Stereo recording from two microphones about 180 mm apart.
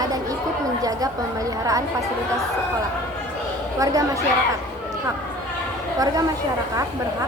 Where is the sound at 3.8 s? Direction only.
20° right (ahead or behind).